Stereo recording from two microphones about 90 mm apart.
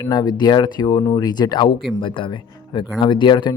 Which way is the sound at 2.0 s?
70° left (ahead or behind).